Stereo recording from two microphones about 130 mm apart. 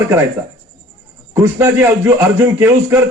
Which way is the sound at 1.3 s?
20° right (ahead or behind).